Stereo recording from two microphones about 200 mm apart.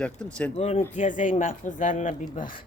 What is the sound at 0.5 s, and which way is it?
Speech, 30° left (ahead or behind).